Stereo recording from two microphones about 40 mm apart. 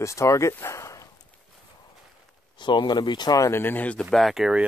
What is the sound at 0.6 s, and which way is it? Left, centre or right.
Speech, left.